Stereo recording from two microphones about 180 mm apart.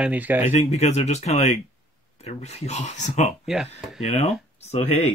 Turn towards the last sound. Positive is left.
turn(degrees=35)  # may be behind; listen again after turning